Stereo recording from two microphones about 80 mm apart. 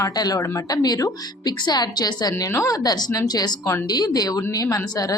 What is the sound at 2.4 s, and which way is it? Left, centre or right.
A woman's voice, left.